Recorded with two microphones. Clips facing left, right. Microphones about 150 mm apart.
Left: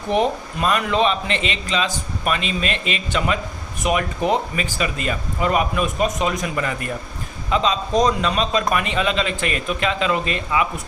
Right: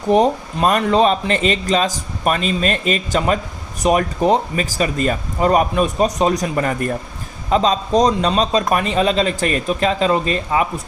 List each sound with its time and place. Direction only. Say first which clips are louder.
0.1 s a man's voice: right 5 dB; 40° right (ahead or behind)